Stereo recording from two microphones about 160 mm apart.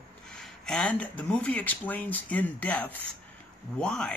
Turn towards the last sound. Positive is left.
turn(degrees=5)  # may be behind; listen again after turning